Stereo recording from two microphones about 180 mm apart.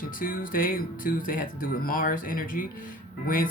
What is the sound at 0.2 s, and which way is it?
Speech, 50° left (ahead or behind).